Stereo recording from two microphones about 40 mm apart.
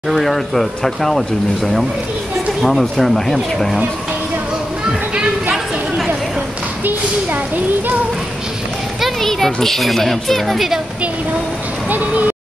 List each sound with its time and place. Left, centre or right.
0.1 s a child's voice: centre
5.1 s a sound: right
9.2 s a child's voice: centre